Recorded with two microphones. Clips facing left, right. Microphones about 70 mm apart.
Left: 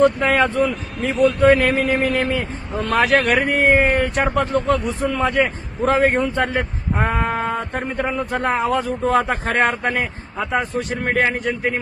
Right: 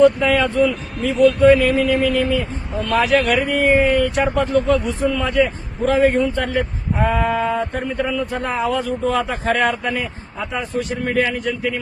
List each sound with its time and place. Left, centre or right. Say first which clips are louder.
0.0 s speech: right 2 dB; left